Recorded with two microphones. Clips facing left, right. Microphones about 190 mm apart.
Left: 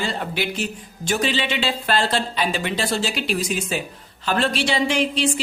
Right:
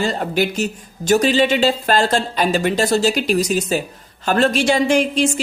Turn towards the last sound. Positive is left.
turn(degrees=-45)  # may be behind; listen again after turning